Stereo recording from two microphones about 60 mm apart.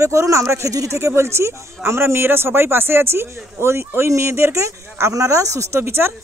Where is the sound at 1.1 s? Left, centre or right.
Right.